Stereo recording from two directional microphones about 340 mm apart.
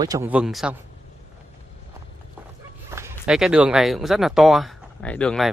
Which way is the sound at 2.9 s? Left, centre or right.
Centre.